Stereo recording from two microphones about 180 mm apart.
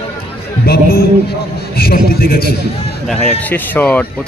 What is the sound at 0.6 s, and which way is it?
A man's voice, 60° left (ahead or behind).